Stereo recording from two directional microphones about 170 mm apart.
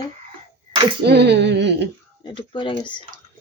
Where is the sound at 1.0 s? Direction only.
85° right.